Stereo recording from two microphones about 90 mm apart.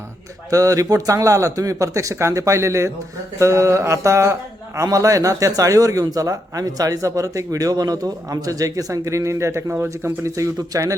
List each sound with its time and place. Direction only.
0.5 s a man's voice: 40° right (ahead or behind)